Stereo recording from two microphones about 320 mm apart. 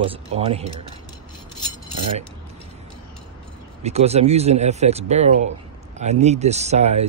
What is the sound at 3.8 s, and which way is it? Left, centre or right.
Speech, centre.